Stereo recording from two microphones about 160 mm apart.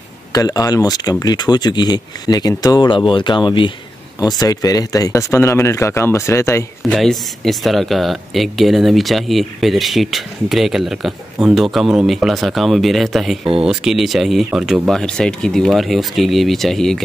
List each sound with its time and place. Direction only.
0.3 s speech: 20° left (ahead or behind)
6.8 s speech: centre (ahead or behind)